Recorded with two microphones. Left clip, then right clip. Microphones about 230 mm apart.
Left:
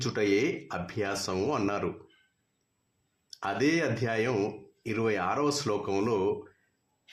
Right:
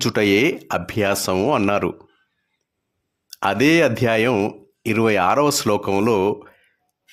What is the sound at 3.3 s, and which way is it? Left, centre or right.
Speech, right.